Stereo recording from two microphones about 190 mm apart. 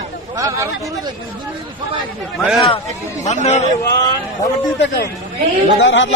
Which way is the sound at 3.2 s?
35° left (ahead or behind).